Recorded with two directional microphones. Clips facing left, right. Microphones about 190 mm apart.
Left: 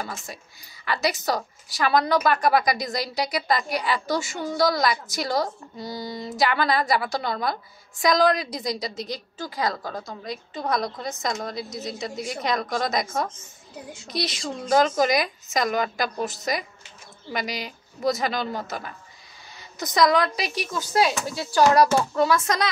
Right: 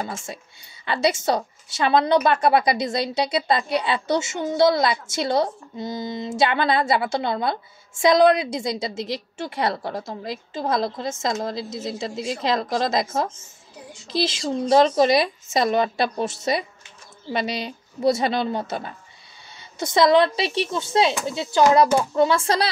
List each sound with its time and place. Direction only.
0.0 s a woman's voice: 25° right (ahead or behind)
22.2 s a woman's voice: 30° right (ahead or behind)